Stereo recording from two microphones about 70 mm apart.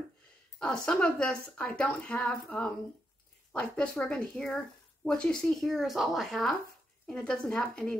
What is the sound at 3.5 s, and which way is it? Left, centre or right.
Speech, centre.